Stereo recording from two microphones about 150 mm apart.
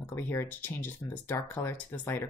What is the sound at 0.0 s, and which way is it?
Speech, 15° left (ahead or behind).